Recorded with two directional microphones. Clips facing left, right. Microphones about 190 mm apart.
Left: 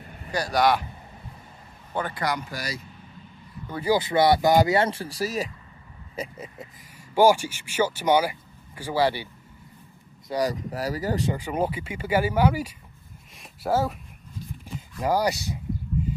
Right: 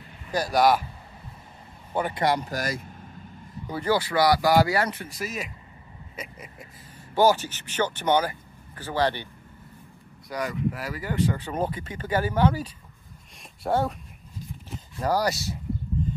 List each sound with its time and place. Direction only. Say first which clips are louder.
0.0 s a sound: left 4 dB; 45° left (ahead or behind)
0.3 s speech: right 1 dB; centre (ahead or behind)
1.9 s speech: right 2 dB; 10° right (ahead or behind)
2.1 s speech: right 4 dB; 30° right (ahead or behind)
2.5 s speech: right 4 dB; 50° right (ahead or behind)
3.8 s speech: left 2 dB; 20° left (ahead or behind)
7.2 s speech: left 2 dB; 10° left (ahead or behind)
10.2 s speech: left 2 dB; 35° left (ahead or behind)
11.3 s speech: left 2 dB; 10° left (ahead or behind)
15.0 s speech: left 1 dB; 15° left (ahead or behind)
16.0 s a sound: even; 10° left (ahead or behind)